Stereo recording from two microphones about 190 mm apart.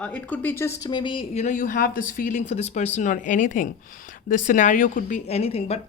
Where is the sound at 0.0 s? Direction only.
10° left (ahead or behind).